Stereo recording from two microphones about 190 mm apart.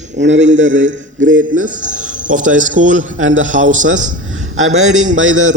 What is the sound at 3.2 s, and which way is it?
Speech, 90° right.